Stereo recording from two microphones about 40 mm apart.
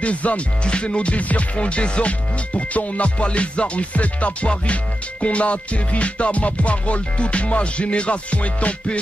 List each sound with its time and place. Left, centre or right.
0.0 s music: left